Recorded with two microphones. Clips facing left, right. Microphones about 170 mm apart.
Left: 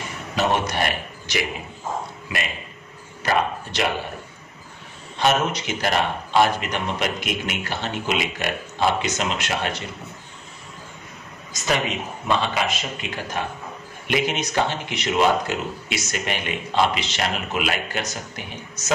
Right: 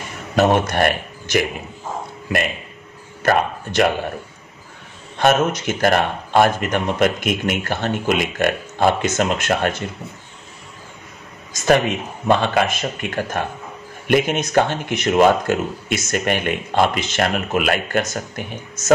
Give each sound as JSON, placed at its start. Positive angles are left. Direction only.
{"t": 0.4, "sound": "speech", "side_deg": -50}
{"t": 3.2, "sound": "speech", "side_deg": -50}
{"t": 5.2, "sound": "speech", "side_deg": -50}
{"t": 12.3, "sound": "speech", "side_deg": -55}